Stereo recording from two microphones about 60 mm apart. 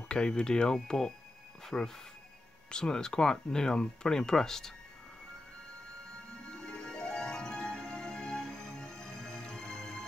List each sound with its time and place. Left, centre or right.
0.1 s speech: centre
6.5 s music: centre